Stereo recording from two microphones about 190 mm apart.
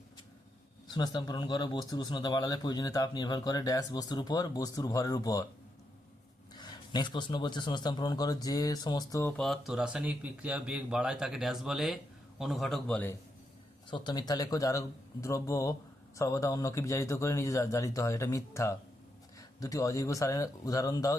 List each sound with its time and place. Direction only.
0.9 s speech: 20° left (ahead or behind)
6.5 s speech: 20° left (ahead or behind)
9.4 s speech: centre (ahead or behind)
13.9 s speech: 25° left (ahead or behind)